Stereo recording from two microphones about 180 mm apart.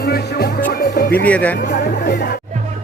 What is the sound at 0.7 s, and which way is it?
Speech, 55° left (ahead or behind).